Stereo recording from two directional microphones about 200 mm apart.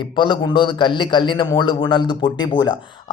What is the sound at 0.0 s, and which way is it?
A man's voice, 25° left (ahead or behind).